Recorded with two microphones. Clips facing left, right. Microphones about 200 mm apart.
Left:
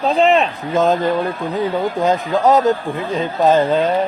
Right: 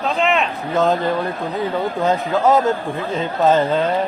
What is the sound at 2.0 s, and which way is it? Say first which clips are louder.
Speech: left 1 dB; 20° left (ahead or behind).